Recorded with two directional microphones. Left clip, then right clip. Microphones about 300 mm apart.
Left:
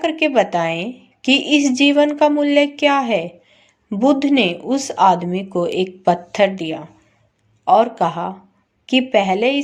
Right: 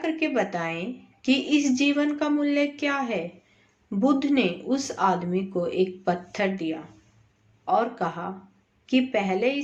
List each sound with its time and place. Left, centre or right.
0.0 s a woman's voice: left